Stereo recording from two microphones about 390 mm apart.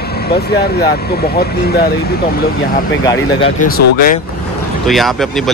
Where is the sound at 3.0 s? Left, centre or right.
Centre.